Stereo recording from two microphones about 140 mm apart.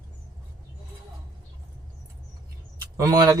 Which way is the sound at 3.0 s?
25° right (ahead or behind).